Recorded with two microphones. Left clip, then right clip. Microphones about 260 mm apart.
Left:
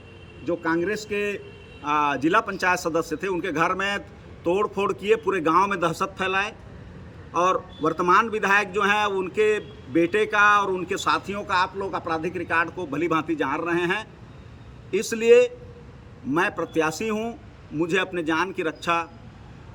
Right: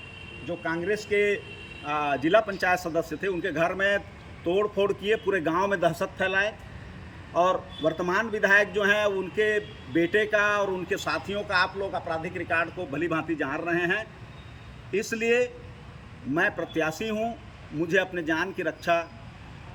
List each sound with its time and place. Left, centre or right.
1.8 s a man's voice: centre
7.5 s a man's voice: centre